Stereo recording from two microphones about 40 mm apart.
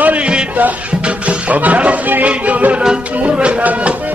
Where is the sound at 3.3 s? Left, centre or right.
Right.